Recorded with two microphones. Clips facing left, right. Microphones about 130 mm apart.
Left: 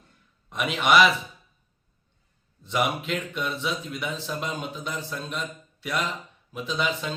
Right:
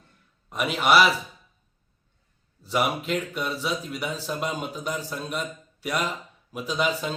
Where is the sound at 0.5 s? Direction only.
Centre (ahead or behind).